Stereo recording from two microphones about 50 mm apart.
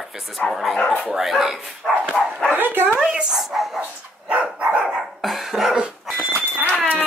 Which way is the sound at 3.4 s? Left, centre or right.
Centre.